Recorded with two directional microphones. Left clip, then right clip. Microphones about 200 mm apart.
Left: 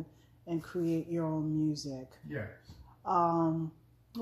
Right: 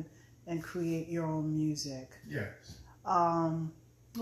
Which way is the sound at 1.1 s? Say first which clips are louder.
Left 1 dB; 15° left (ahead or behind).